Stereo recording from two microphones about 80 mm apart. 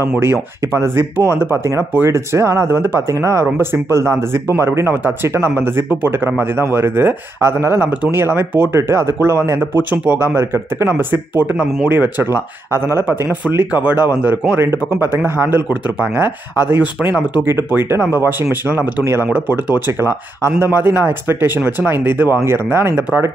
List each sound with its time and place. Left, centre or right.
0.2 s speech: right